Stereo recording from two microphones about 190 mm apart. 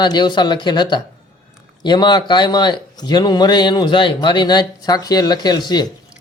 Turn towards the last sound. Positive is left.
turn(degrees=20)  # may be behind; listen again after turning